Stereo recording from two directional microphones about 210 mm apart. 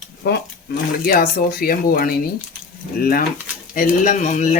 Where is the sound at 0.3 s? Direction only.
45° left (ahead or behind).